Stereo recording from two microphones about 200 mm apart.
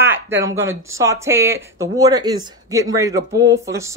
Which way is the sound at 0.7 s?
15° right (ahead or behind).